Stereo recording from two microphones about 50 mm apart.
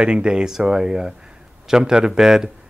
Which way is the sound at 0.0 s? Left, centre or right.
Centre.